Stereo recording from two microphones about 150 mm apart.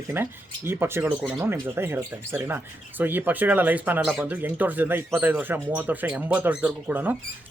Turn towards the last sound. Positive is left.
turn(degrees=-10)  # may be behind; listen again after turning